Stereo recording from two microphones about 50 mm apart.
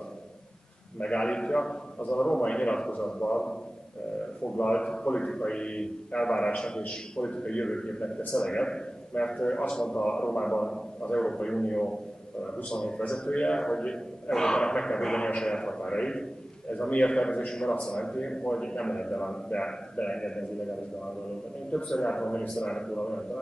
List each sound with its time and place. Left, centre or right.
1.0 s a man's voice: centre
4.6 s a man's voice: centre
21.7 s a man's voice: centre